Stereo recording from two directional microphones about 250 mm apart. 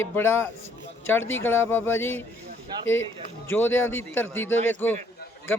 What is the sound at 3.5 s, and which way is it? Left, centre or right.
A man's voice, centre.